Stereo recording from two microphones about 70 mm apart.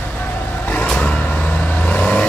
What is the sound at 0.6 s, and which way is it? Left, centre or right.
Vehicle, centre.